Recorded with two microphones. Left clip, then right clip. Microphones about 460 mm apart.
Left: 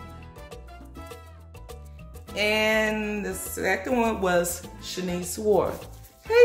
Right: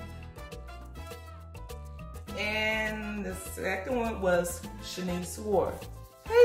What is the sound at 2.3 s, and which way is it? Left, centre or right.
Speech, centre.